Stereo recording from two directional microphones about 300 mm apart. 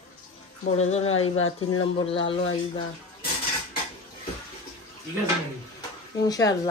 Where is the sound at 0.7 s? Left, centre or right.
Left.